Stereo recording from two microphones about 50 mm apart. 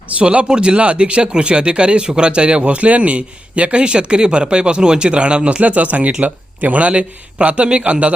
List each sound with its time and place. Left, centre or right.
0.2 s speech: right